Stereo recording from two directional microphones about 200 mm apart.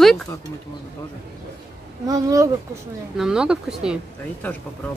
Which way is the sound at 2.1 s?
15° right (ahead or behind).